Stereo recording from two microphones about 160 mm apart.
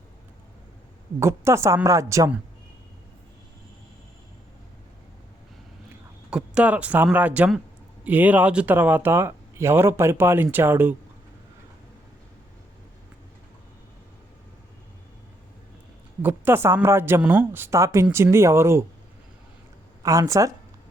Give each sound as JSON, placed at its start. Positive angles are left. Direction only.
{"t": 1.2, "sound": "a woman's voice", "side_deg": -15}
{"t": 6.3, "sound": "speech", "side_deg": -5}
{"t": 16.2, "sound": "speech", "side_deg": -15}
{"t": 20.0, "sound": "a woman's voice", "side_deg": -20}